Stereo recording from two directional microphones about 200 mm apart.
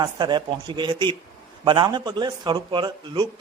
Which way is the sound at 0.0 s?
20° right (ahead or behind).